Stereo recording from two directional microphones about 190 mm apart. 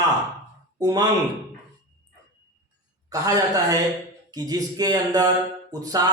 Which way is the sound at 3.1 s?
20° right (ahead or behind).